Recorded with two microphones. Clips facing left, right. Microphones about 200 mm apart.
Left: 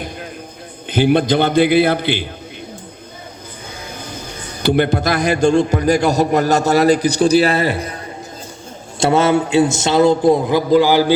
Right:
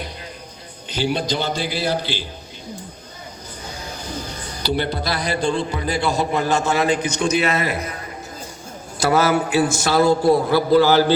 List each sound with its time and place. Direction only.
0.9 s a man's voice: 55° left (ahead or behind)
4.6 s a man's voice: 50° left (ahead or behind); by 7.9 s 30° left (ahead or behind)
9.0 s a man's voice: 25° left (ahead or behind)